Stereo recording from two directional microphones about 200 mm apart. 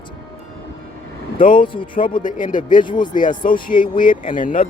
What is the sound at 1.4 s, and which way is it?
Speech, 45° left (ahead or behind).